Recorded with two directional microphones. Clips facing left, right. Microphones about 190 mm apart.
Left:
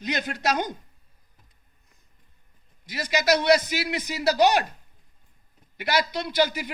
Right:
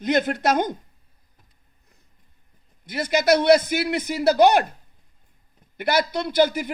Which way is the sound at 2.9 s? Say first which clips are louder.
Right 4 dB; 55° right (ahead or behind).